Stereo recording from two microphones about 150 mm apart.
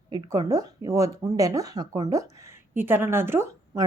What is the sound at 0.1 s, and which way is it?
Speech, 30° right (ahead or behind).